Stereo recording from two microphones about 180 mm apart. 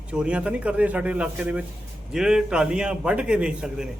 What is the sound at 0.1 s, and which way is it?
A man's voice, 5° right (ahead or behind).